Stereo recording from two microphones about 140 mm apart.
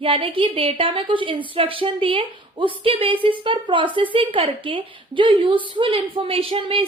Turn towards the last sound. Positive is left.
turn(degrees=-40)  # may be behind; listen again after turning